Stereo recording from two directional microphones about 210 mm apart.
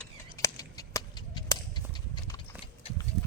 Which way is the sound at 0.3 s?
15° left (ahead or behind).